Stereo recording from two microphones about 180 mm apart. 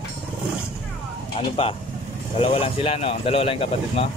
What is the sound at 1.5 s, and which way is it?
Speech, 30° left (ahead or behind).